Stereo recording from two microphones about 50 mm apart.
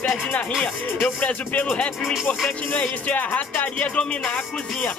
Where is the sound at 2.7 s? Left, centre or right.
Left.